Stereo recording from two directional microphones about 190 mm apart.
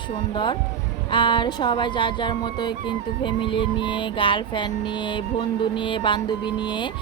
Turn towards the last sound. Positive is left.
turn(degrees=25)  # may be behind; listen again after turning